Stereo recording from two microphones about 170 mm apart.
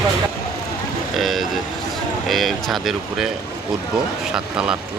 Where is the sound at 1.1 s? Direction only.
Centre (ahead or behind).